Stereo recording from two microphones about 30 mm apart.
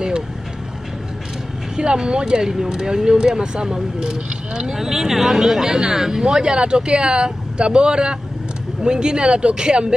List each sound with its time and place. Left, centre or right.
1.8 s speech: right
4.7 s speech: centre